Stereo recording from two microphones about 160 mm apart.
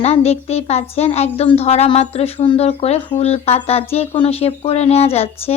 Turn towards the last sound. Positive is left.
turn(degrees=40)  # may be behind; listen again after turning